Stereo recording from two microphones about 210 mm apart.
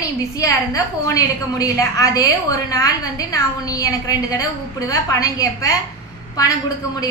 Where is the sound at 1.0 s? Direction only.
15° left (ahead or behind).